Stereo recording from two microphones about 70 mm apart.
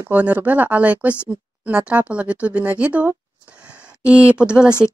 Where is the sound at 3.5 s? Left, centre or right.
Centre.